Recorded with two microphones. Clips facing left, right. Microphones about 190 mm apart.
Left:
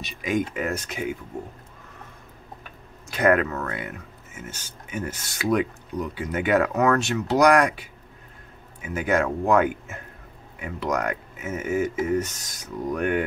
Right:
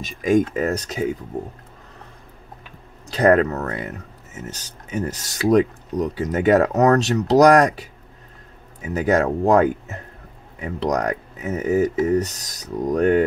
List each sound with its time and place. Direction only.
0.0 s speech: 45° right (ahead or behind)
3.1 s speech: 35° right (ahead or behind)